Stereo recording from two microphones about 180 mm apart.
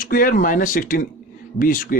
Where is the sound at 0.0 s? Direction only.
50° left (ahead or behind).